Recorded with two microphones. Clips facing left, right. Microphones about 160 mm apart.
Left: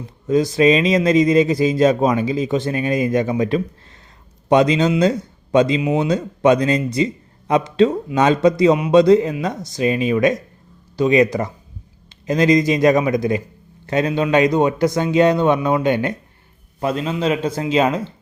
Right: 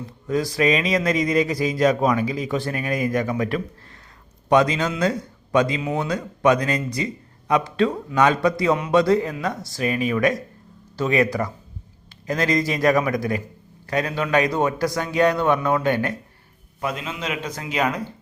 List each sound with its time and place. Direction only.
0.3 s speech: 20° left (ahead or behind)
16.8 s speech: 35° left (ahead or behind)